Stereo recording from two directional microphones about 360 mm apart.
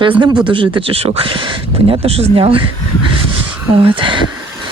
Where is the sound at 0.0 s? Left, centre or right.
Centre.